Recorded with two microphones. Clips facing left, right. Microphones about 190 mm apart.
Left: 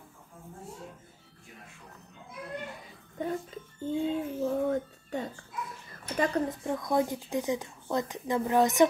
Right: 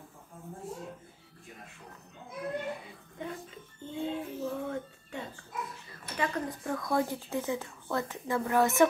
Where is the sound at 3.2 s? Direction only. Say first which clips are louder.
Left 7 dB; 40° left (ahead or behind).